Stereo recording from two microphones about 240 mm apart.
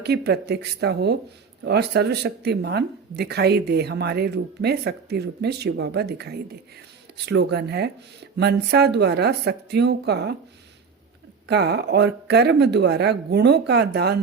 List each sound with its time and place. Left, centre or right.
0.0 s speech: right
11.4 s speech: right